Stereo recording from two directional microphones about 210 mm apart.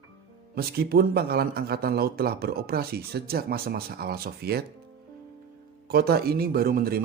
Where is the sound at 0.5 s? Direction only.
45° right (ahead or behind).